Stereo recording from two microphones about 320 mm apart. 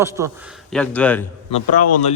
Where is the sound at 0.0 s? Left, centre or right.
Centre.